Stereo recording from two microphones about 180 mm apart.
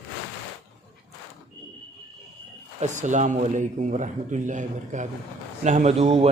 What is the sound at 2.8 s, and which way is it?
A man's voice, 40° right (ahead or behind).